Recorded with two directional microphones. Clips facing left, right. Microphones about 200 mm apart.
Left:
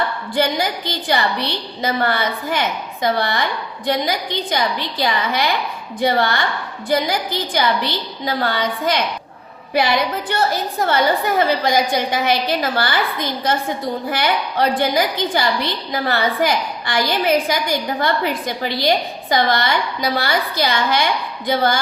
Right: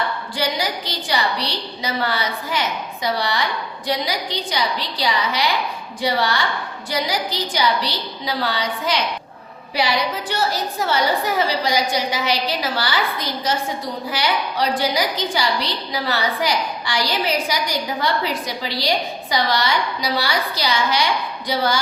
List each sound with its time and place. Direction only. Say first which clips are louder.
0.3 s a woman's voice: left 5 dB; 55° left (ahead or behind)